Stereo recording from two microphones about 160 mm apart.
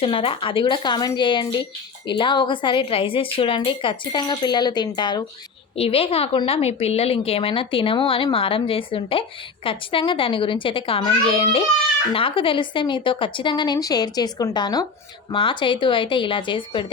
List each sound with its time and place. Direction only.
0.0 s a woman's voice: 35° left (ahead or behind)
5.7 s a woman's voice: 35° left (ahead or behind)